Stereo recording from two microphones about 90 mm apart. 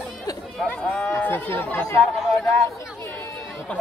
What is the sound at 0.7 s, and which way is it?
Speech, 10° left (ahead or behind).